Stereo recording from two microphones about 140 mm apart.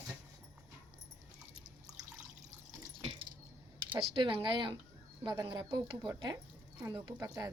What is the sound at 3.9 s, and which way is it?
Speech, 35° right (ahead or behind).